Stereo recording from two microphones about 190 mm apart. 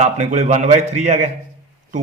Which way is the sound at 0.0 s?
35° right (ahead or behind).